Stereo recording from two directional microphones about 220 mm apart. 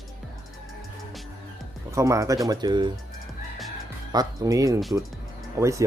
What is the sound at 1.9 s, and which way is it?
Speech, 15° right (ahead or behind).